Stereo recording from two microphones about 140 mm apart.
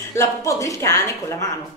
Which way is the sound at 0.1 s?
20° left (ahead or behind).